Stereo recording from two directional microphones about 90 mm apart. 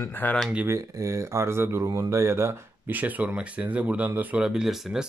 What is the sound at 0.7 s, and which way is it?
Speech, 35° right (ahead or behind).